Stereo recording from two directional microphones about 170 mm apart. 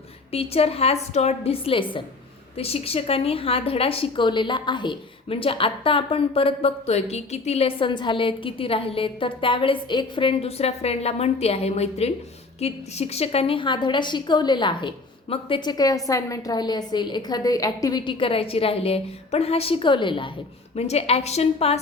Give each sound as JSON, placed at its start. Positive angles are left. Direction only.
{"t": 0.3, "sound": "a woman's voice", "side_deg": 35}